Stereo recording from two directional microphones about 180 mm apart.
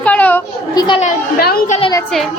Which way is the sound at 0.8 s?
25° left (ahead or behind).